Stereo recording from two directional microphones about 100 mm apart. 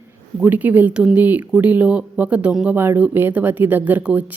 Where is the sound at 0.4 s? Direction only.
20° right (ahead or behind).